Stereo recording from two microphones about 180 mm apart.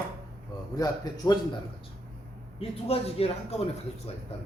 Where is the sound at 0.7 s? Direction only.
20° left (ahead or behind).